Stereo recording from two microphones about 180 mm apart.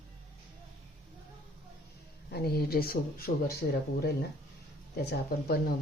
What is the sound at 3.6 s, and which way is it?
Speech, 70° left (ahead or behind).